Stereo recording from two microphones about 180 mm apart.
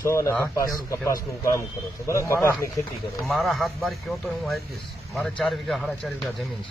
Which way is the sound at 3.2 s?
Centre (ahead or behind).